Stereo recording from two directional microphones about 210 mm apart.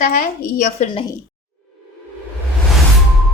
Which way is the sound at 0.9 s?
25° left (ahead or behind).